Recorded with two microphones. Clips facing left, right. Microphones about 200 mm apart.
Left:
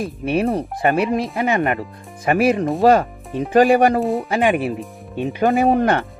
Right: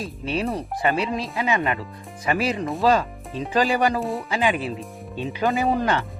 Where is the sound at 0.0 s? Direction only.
55° left (ahead or behind).